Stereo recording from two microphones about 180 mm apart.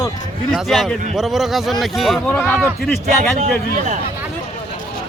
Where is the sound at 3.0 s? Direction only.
40° right (ahead or behind).